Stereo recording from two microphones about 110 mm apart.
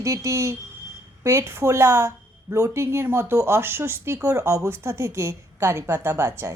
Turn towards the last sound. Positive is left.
turn(degrees=-25)  # may be behind; listen again after turning